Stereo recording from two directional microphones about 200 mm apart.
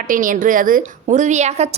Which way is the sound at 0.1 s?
40° right (ahead or behind).